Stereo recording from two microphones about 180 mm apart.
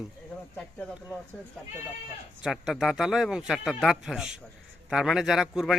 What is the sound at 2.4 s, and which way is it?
A man's voice, centre (ahead or behind).